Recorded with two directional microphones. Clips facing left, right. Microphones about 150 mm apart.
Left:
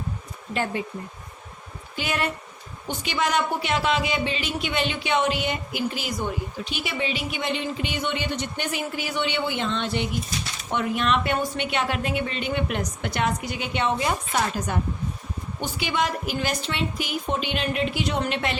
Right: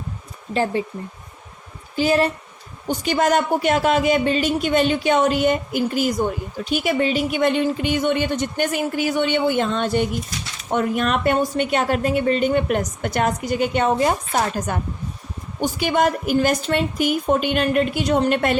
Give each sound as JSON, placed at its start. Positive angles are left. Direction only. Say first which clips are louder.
{"t": 0.5, "sound": "speech", "louder": "right 6 dB", "side_deg": -30}
{"t": 2.0, "sound": "a woman's voice", "louder": "right 9 dB", "side_deg": -35}